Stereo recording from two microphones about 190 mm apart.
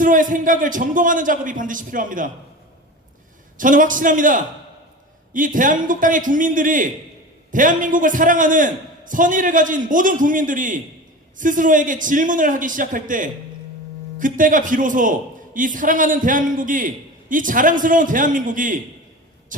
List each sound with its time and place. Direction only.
0.0 s a man's voice: 45° right (ahead or behind)
3.6 s a man's voice: 45° right (ahead or behind)